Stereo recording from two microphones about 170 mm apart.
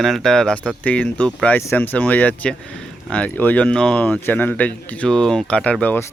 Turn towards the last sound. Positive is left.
turn(degrees=10)  # may be behind; listen again after turning